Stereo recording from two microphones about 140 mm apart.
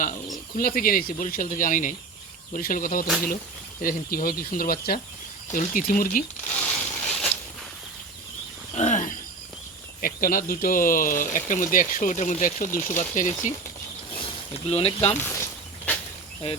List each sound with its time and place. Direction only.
0.5 s speech: 90° left; by 2.0 s 75° left (ahead or behind)
2.5 s speech: 85° left
5.5 s speech: 70° left (ahead or behind)
6.5 s crushing: 10° left (ahead or behind)
7.1 s a sound: centre (ahead or behind)
8.7 s wild animals: 55° left (ahead or behind)
10.0 s speech: 90° left; by 13.3 s 60° left (ahead or behind)
14.1 s a sound: 40° left (ahead or behind)
15.1 s speech: 15° left (ahead or behind)
15.9 s a sound: 10° left (ahead or behind)